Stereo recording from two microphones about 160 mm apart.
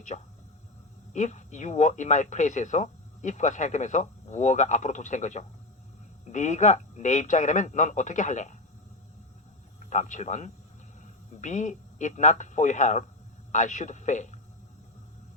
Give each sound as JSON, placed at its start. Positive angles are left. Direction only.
{"t": 0.1, "sound": "speech", "side_deg": 45}
{"t": 9.8, "sound": "speech", "side_deg": 45}